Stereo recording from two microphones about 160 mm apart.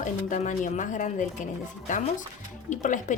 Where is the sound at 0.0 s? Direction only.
50° left (ahead or behind).